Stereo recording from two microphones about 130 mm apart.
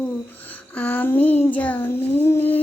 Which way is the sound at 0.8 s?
10° left (ahead or behind).